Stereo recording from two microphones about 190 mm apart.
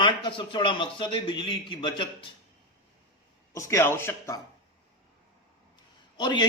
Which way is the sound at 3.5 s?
15° left (ahead or behind).